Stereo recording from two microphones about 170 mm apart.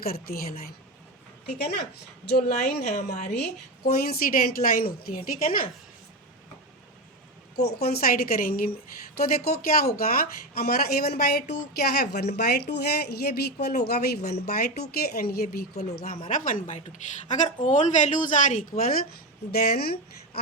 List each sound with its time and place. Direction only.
0.0 s speech: 60° left (ahead or behind)
1.5 s a woman's voice: 70° left (ahead or behind)
2.9 s a woman's voice: 45° left (ahead or behind)
3.8 s speech: 60° left (ahead or behind)
7.5 s a woman's voice: 65° left (ahead or behind)
16.3 s a woman's voice: 50° left (ahead or behind)